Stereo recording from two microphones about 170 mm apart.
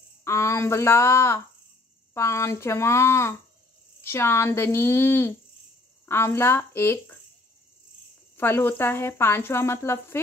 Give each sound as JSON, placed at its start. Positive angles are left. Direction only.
{"t": 0.2, "sound": "speech", "side_deg": 15}
{"t": 8.4, "sound": "speech", "side_deg": 15}